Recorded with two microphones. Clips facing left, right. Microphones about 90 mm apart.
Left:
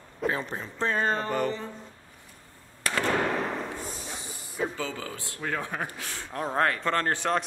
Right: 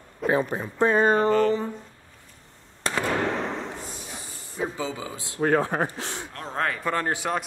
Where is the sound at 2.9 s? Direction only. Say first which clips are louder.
Right 2 dB; 30° right (ahead or behind).